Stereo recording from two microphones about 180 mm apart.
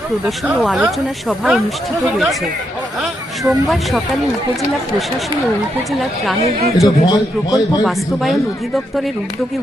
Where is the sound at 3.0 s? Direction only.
Centre (ahead or behind).